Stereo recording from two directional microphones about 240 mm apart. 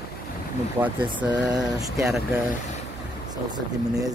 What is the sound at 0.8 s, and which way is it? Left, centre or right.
Speech, centre.